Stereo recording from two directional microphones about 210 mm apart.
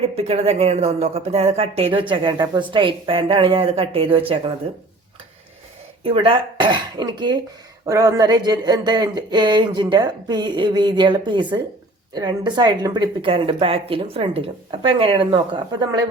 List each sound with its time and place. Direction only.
0.2 s speech: 30° right (ahead or behind)
6.0 s speech: 25° right (ahead or behind)